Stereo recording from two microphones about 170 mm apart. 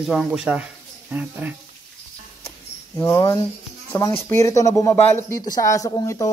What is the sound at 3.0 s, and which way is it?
Speech, 20° left (ahead or behind).